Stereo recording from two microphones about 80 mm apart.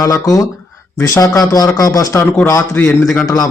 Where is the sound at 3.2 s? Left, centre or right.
Left.